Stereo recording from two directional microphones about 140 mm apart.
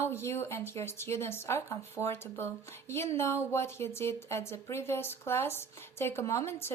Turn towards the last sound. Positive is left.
turn(degrees=15)  # may be behind; listen again after turning